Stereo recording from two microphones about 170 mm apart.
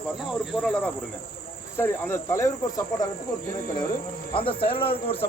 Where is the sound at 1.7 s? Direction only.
15° left (ahead or behind).